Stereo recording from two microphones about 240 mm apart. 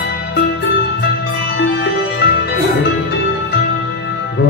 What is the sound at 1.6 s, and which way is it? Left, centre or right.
Music, left.